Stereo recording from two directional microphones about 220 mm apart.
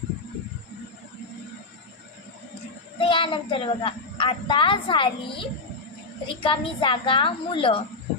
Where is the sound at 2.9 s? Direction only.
20° left (ahead or behind).